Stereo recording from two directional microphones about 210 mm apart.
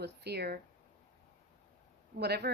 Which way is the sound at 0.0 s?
50° right (ahead or behind).